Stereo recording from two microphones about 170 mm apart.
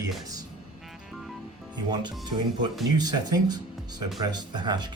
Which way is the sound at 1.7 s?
25° right (ahead or behind).